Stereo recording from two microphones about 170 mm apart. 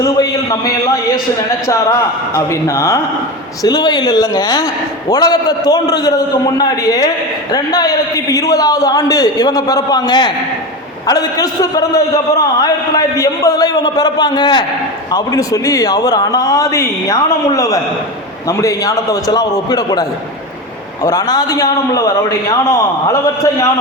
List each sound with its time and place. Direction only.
0.0 s a man's voice: 20° left (ahead or behind)